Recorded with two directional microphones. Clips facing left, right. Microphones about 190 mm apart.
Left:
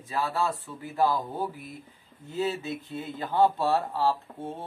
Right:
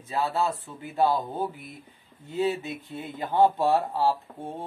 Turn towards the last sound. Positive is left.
turn(degrees=-15)  # may be behind; listen again after turning